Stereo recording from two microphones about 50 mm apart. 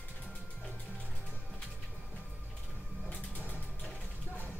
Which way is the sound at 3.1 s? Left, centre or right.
Left.